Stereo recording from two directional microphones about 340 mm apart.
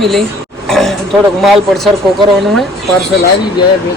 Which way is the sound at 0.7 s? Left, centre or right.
Centre.